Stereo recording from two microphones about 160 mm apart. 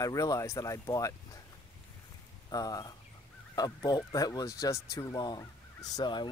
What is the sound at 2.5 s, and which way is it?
Speech, 25° left (ahead or behind).